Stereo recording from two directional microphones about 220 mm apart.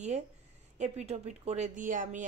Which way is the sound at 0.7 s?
30° right (ahead or behind).